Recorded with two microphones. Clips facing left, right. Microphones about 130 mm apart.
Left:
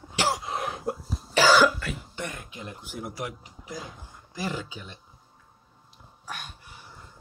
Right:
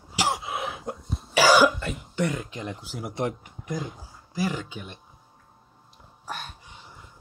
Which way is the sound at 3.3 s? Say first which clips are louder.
Right 6 dB; 50° right (ahead or behind).